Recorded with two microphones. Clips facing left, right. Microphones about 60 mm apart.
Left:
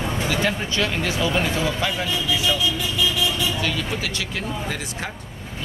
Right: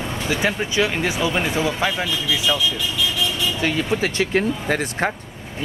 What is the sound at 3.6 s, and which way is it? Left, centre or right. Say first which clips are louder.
Speech: right 5 dB; right.